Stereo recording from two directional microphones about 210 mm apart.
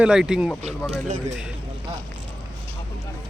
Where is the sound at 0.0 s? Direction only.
5° right (ahead or behind).